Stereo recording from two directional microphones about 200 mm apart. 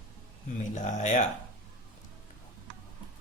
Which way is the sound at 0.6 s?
35° left (ahead or behind).